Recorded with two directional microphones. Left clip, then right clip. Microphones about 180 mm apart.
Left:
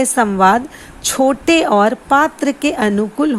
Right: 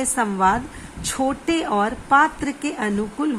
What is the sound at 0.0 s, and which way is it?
A woman's voice, 35° left (ahead or behind).